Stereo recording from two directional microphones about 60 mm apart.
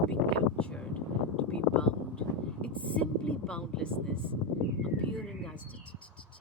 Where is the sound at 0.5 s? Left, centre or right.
Centre.